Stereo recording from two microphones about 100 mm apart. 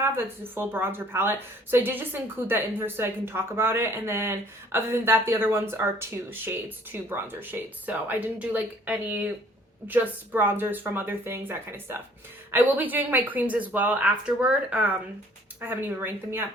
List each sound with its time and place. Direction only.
0.0 s a woman's voice: 25° right (ahead or behind)